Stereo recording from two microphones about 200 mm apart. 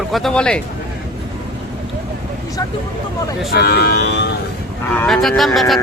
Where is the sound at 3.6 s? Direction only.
55° left (ahead or behind).